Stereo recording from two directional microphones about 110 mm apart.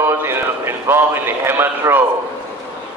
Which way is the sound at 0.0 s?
20° right (ahead or behind).